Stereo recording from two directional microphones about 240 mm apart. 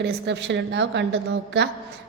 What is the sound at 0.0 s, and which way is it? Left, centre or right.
A woman's voice, right.